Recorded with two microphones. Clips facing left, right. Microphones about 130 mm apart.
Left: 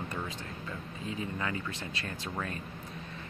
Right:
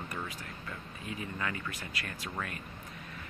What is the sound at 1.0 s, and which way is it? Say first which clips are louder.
Speech: left 2 dB; 25° left (ahead or behind).